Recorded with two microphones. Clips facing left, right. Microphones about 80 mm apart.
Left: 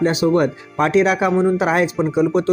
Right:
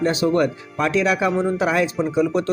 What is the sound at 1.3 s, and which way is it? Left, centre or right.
Speech, centre.